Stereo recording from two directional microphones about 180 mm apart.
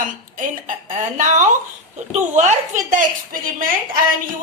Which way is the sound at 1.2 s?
45° right (ahead or behind).